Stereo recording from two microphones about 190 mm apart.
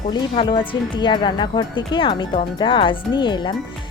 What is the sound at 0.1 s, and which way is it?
Speech, 25° left (ahead or behind).